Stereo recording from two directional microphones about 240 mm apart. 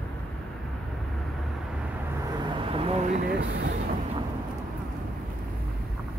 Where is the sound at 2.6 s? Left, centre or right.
Right.